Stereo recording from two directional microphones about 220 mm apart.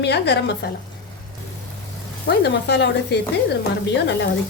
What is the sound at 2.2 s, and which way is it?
A woman's voice, 50° left (ahead or behind).